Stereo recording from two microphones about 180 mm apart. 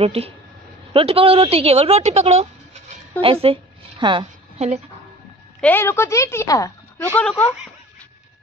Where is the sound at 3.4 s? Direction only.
30° right (ahead or behind).